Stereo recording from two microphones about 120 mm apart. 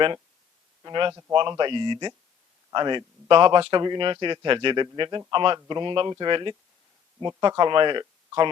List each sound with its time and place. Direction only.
1.3 s a man's voice: 45° right (ahead or behind)